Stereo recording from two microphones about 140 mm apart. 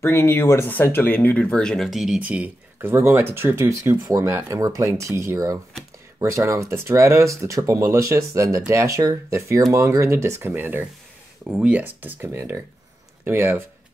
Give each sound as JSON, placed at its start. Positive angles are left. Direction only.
{"t": 0.0, "sound": "speech", "side_deg": 20}